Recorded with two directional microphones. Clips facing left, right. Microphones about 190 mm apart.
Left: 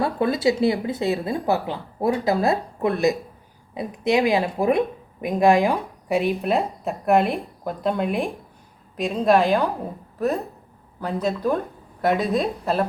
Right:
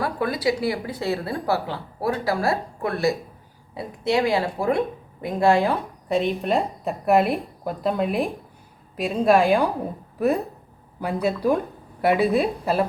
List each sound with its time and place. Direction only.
0.0 s a woman's voice: 25° left (ahead or behind); by 9.6 s 10° right (ahead or behind)
11.0 s a woman's voice: 10° right (ahead or behind)